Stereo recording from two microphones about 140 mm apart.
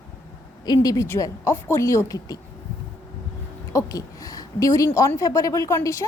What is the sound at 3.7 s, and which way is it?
A woman's voice, 25° left (ahead or behind).